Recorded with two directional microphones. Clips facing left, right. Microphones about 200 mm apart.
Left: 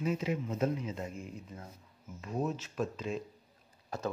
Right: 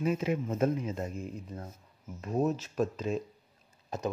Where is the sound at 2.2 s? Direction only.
40° right (ahead or behind).